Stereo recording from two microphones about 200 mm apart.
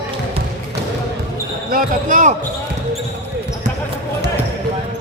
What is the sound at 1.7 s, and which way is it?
Speech, 40° right (ahead or behind).